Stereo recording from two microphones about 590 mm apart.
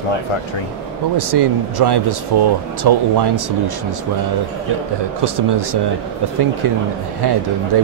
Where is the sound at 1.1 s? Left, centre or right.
Right.